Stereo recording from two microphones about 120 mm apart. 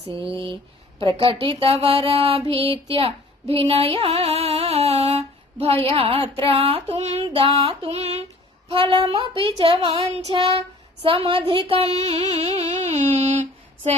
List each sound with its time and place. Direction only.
0.2 s mantra: 45° right (ahead or behind)
3.5 s music: 50° right (ahead or behind)
6.3 s mantra: 50° right (ahead or behind); by 7.2 s 70° right (ahead or behind)
7.3 s mantra: 50° right (ahead or behind)
8.7 s mantra: 50° right (ahead or behind)
11.0 s music: 50° right (ahead or behind); by 13.9 s 70° right (ahead or behind)